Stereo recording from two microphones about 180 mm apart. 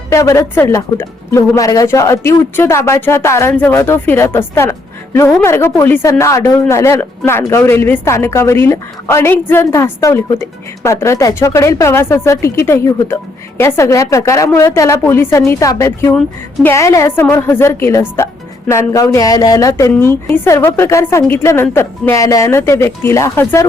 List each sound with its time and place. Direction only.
0.1 s speech: 15° left (ahead or behind)